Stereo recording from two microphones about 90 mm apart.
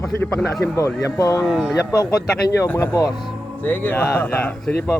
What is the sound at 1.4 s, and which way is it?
Speech, centre (ahead or behind).